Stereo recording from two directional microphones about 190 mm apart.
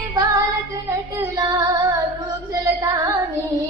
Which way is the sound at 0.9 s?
15° right (ahead or behind).